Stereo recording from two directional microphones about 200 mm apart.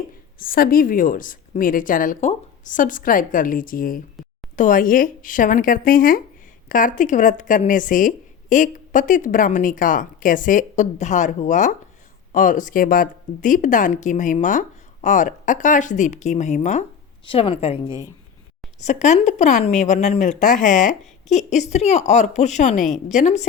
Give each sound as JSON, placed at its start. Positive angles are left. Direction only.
{"t": 0.3, "sound": "a woman's voice", "side_deg": 45}